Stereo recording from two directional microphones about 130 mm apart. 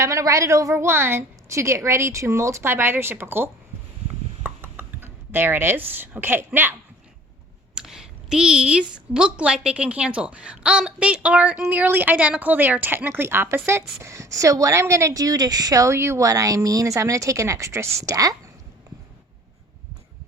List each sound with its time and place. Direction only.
0.0 s a woman's voice: 25° right (ahead or behind)
4.4 s computer keyboard: 15° right (ahead or behind)
7.8 s a woman's voice: 5° right (ahead or behind); by 18.3 s 25° right (ahead or behind)